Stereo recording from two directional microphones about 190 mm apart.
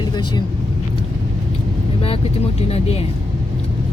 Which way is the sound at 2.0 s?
30° left (ahead or behind).